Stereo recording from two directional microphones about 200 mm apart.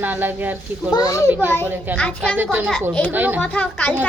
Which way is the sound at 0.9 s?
20° left (ahead or behind).